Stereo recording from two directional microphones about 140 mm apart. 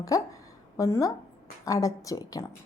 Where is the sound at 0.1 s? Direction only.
25° left (ahead or behind).